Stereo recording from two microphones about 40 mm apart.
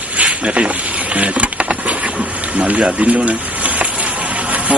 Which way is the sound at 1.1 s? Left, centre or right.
Right.